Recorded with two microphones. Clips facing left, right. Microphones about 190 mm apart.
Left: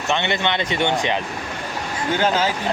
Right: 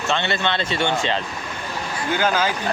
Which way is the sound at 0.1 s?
20° left (ahead or behind).